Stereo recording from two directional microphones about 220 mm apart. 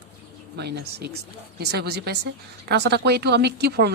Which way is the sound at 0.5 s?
50° right (ahead or behind).